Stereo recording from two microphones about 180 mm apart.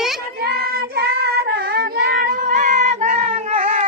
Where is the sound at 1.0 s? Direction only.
60° right (ahead or behind).